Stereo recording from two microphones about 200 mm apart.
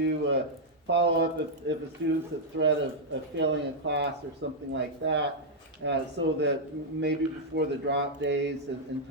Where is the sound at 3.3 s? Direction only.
60° right (ahead or behind).